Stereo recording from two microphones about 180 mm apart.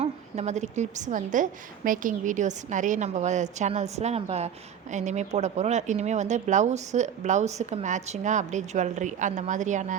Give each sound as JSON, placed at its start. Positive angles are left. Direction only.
{"t": 0.0, "sound": "a woman's voice", "side_deg": -40}